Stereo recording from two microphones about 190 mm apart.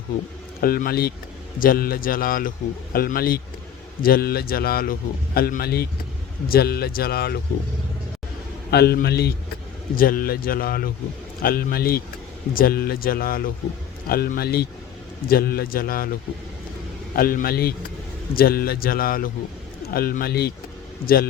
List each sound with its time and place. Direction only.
0.6 s speech: 50° left (ahead or behind)
8.7 s speech: 55° left (ahead or behind)
17.2 s speech: 50° left (ahead or behind)